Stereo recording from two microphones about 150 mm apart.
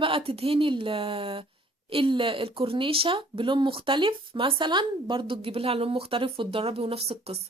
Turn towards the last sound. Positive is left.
turn(degrees=-40)  # may be behind; listen again after turning